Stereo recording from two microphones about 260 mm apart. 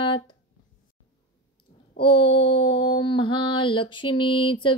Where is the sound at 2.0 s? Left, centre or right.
Centre.